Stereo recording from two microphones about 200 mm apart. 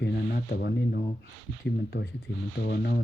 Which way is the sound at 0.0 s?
50° left (ahead or behind).